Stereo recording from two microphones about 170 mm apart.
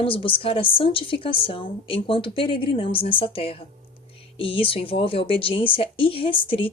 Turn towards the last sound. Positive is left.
turn(degrees=30)  # may be behind; listen again after turning